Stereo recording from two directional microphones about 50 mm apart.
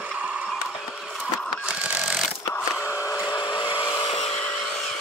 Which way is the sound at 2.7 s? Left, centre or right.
Right.